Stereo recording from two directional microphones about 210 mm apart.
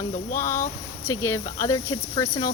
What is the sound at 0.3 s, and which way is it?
Speech, 10° left (ahead or behind).